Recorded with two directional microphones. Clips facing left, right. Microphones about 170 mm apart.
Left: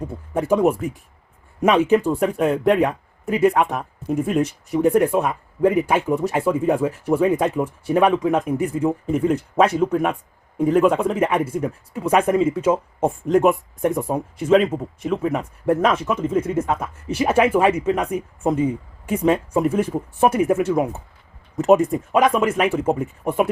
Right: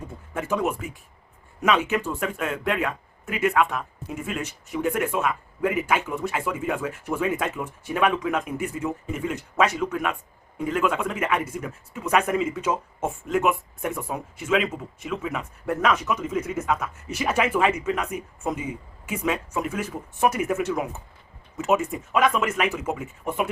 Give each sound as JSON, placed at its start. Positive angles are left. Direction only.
{"t": 0.3, "sound": "speech", "side_deg": 35}
{"t": 15.6, "sound": "speech", "side_deg": 30}